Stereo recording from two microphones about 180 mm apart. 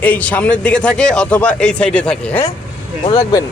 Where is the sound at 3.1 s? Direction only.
20° left (ahead or behind).